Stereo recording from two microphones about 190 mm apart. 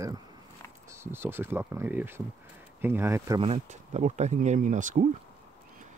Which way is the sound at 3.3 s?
35° right (ahead or behind).